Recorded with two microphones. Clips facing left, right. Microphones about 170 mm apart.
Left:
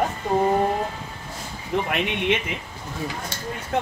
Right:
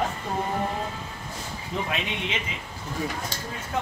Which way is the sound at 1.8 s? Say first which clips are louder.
Left 7 dB; 60° left (ahead or behind).